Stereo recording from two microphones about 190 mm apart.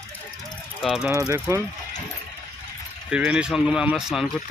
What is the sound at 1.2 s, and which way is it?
Speech, 15° right (ahead or behind).